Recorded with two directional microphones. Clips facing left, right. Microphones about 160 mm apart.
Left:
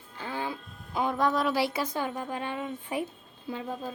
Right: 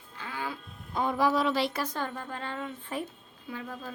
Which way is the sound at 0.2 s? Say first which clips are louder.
Left 3 dB; 30° left (ahead or behind).